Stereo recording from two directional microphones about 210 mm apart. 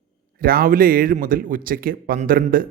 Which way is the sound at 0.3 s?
45° right (ahead or behind).